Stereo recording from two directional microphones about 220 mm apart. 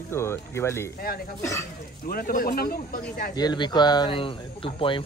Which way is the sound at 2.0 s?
40° left (ahead or behind).